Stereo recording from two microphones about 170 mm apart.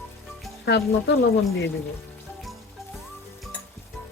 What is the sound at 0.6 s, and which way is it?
Speech, 90° left.